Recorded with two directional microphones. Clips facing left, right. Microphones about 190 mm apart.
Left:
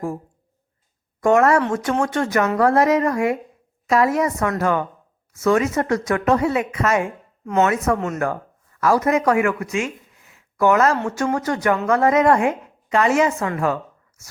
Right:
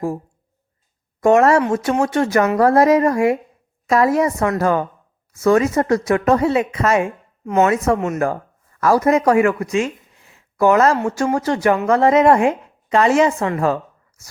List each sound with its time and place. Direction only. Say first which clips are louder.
1.2 s a woman's voice: right 3 dB; 25° right (ahead or behind)
6.2 s a woman's voice: right 3 dB; 40° right (ahead or behind); by 8.4 s 25° right (ahead or behind)
8.8 s a woman's voice: right 3 dB; 35° right (ahead or behind)
9.7 s a sound: right 4 dB; 30° right (ahead or behind)
11.3 s a woman's voice: right 3 dB; 30° right (ahead or behind)